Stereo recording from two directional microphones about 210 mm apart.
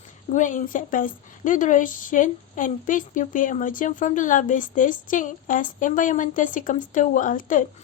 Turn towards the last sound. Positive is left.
turn(degrees=40)  # may be behind; listen again after turning